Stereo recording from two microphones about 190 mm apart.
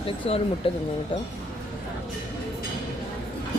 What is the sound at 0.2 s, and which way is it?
Speech, 30° left (ahead or behind).